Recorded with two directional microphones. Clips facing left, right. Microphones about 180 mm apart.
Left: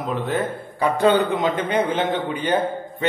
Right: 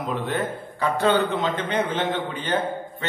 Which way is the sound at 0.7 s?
15° left (ahead or behind).